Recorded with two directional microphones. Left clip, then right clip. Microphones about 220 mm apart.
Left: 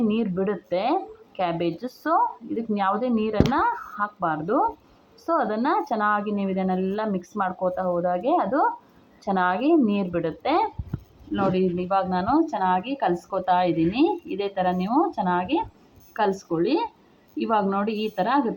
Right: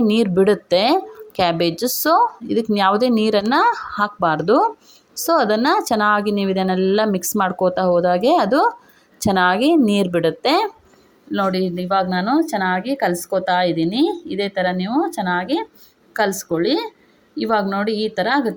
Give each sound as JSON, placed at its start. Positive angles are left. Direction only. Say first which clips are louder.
{"t": 0.0, "sound": "speech", "louder": "right 9 dB", "side_deg": -50}
{"t": 11.9, "sound": "a woman's voice", "louder": "right 6 dB", "side_deg": -30}